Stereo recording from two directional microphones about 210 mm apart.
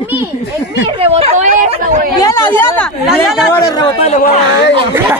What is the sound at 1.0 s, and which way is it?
Chatter, 30° right (ahead or behind).